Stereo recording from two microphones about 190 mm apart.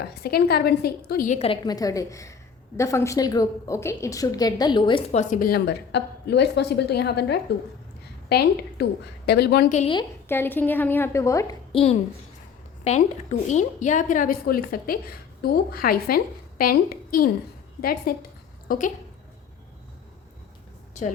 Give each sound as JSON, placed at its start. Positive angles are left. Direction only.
{"t": 0.0, "sound": "a woman's voice", "side_deg": 55}
{"t": 1.6, "sound": "a woman's voice", "side_deg": 20}
{"t": 5.3, "sound": "a woman's voice", "side_deg": 50}
{"t": 9.6, "sound": "a woman's voice", "side_deg": 35}
{"t": 10.2, "sound": "a woman's voice", "side_deg": 10}
{"t": 11.7, "sound": "a child's voice", "side_deg": 30}